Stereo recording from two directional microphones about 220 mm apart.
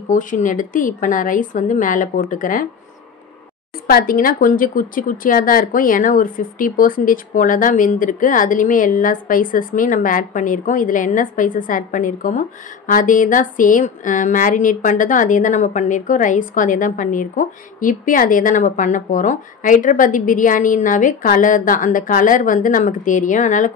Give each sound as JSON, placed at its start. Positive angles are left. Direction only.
{"t": 0.1, "sound": "speech", "side_deg": 35}
{"t": 3.8, "sound": "speech", "side_deg": 40}